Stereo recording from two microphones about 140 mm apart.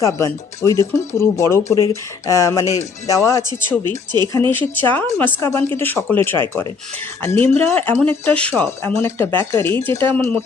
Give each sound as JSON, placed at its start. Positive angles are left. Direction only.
{"t": 0.0, "sound": "speech", "side_deg": 20}